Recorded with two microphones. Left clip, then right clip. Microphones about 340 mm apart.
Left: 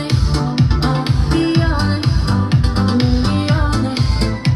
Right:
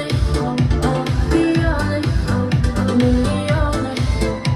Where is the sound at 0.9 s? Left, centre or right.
Left.